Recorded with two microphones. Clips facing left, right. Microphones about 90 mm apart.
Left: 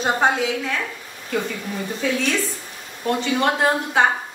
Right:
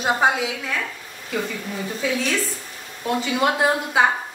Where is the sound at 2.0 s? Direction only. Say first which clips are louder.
Left 1 dB; 5° right (ahead or behind).